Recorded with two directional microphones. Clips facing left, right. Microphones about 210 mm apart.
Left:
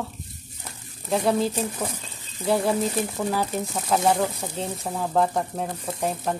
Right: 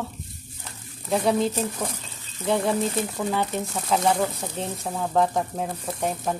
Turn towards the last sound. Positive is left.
turn(degrees=0)  # may be behind; listen again after turning